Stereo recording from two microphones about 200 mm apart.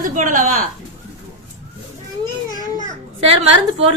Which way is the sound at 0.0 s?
40° right (ahead or behind).